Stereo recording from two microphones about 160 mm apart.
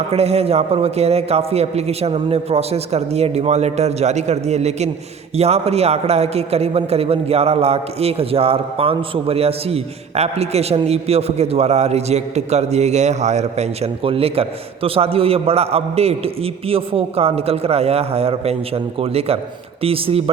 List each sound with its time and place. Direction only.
0.1 s a man's voice: 40° right (ahead or behind)